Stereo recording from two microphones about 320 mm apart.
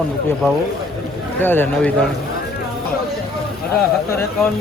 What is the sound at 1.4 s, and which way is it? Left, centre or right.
Speech, centre.